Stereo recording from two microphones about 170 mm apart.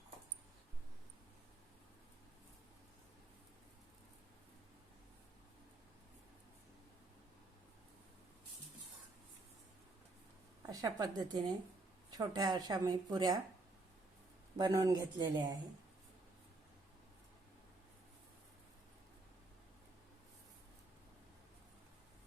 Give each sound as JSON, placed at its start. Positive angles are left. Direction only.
{"t": 10.6, "sound": "speech", "side_deg": -20}
{"t": 14.6, "sound": "speech", "side_deg": -20}